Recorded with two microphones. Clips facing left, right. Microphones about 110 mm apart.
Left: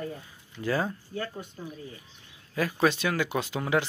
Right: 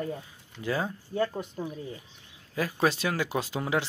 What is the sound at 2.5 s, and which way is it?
Speech, 25° right (ahead or behind).